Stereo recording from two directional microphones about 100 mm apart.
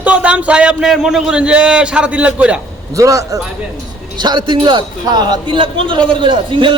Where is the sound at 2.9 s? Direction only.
35° right (ahead or behind).